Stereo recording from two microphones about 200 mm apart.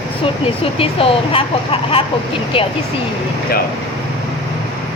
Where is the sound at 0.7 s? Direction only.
25° left (ahead or behind).